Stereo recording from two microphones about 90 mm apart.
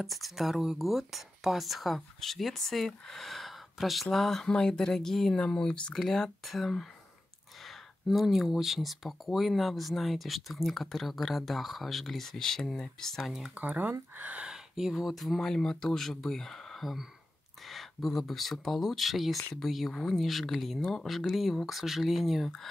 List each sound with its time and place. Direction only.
0.0 s speech: centre (ahead or behind)
13.6 s speech: 20° right (ahead or behind); by 22.7 s centre (ahead or behind)